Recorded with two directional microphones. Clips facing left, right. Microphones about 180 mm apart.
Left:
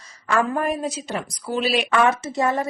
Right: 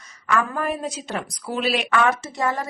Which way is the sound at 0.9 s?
Centre (ahead or behind).